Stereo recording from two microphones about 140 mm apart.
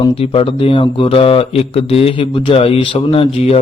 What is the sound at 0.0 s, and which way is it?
Mantra, 40° left (ahead or behind).